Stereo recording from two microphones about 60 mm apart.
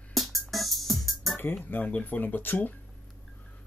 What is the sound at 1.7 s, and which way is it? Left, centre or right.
Speech, left.